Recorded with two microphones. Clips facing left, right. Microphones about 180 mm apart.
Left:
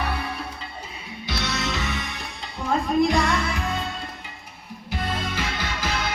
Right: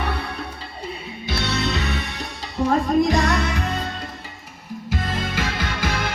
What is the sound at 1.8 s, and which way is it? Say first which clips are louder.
Music: right 3 dB; 65° right (ahead or behind).